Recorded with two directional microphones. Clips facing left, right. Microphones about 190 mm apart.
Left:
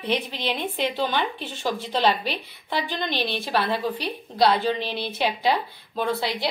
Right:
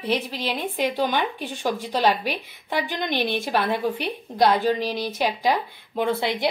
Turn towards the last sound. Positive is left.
turn(degrees=-15)  # may be behind; listen again after turning